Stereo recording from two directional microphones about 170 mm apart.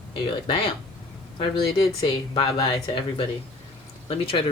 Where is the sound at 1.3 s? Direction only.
30° left (ahead or behind).